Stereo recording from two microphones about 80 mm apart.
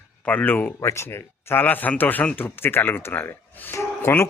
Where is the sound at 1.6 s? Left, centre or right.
Left.